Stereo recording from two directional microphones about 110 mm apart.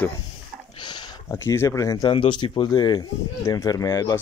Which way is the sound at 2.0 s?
50° left (ahead or behind).